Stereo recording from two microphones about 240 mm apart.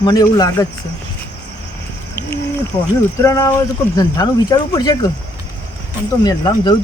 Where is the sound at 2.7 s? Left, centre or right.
Centre.